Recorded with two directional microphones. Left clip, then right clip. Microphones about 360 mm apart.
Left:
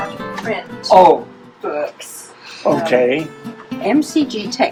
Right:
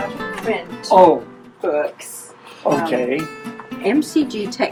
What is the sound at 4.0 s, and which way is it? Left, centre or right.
Speech, centre.